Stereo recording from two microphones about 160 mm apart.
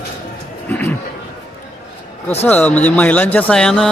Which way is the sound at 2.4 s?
10° left (ahead or behind).